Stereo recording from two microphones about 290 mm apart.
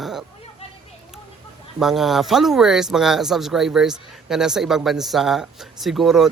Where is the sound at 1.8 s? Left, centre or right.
Centre.